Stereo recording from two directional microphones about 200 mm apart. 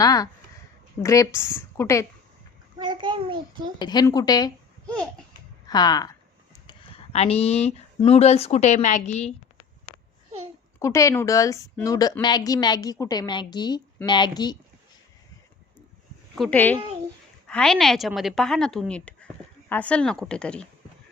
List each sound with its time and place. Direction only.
0.0 s a woman's voice: 20° left (ahead or behind)
2.7 s a child's voice: 25° right (ahead or behind)
3.8 s a woman's voice: 20° left (ahead or behind)
5.6 s speech: 20° left (ahead or behind)
10.8 s a woman's voice: 15° left (ahead or behind)
16.3 s a woman's voice: 5° left (ahead or behind)